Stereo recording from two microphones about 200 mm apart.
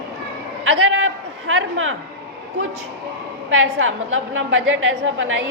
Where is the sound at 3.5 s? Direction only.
80° right.